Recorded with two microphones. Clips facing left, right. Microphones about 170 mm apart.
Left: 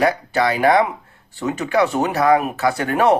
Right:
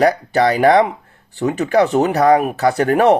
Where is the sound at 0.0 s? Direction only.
35° right (ahead or behind).